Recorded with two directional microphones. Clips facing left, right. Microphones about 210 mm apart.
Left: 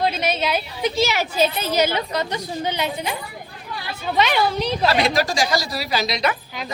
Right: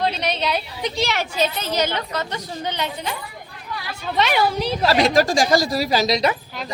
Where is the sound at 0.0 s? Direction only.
5° left (ahead or behind).